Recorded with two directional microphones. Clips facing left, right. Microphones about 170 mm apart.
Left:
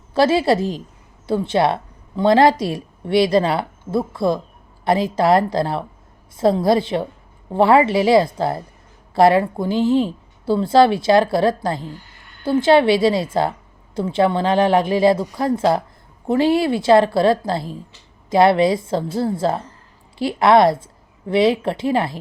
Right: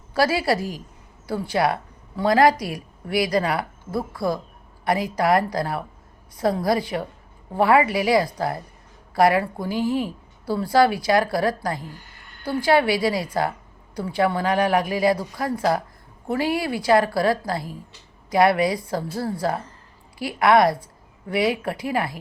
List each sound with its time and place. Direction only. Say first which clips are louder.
0.1 s speech: left 5 dB; 25° left (ahead or behind)